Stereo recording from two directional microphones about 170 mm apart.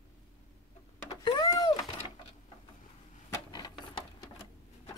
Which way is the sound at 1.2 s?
25° left (ahead or behind).